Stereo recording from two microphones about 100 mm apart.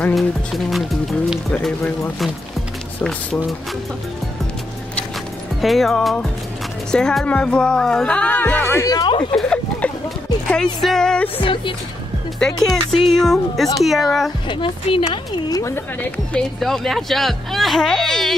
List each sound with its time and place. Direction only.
3.0 s speech: 5° left (ahead or behind)
5.6 s speech: centre (ahead or behind); by 8.8 s 20° left (ahead or behind)
8.8 s speech: 35° left (ahead or behind)
9.3 s a sound: 10° left (ahead or behind)
10.5 s speech: 5° left (ahead or behind)
11.4 s speech: 60° left (ahead or behind)
12.4 s speech: 5° left (ahead or behind)
14.5 s speech: 60° left (ahead or behind)
15.5 s speech: 30° left (ahead or behind)
16.5 s speech: 5° left (ahead or behind)